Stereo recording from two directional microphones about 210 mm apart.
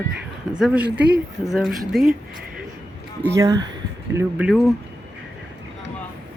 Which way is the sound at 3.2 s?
15° right (ahead or behind).